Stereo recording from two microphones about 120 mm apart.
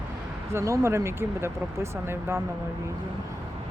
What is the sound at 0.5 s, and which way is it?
Speech, 25° right (ahead or behind).